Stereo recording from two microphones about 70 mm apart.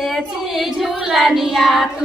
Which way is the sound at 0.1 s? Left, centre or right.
Centre.